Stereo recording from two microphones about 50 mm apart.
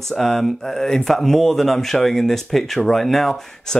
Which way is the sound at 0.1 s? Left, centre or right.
Centre.